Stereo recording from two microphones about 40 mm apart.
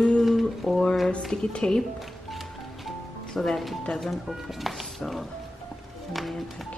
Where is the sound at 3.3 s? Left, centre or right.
Centre.